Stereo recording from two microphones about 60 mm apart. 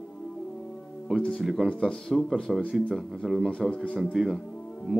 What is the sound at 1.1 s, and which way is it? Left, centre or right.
Music, centre.